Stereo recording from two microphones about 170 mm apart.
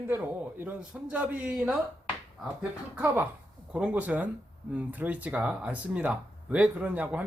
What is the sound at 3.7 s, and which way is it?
Speech, 10° right (ahead or behind).